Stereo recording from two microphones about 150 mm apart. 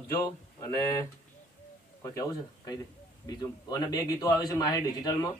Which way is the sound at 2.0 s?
25° left (ahead or behind).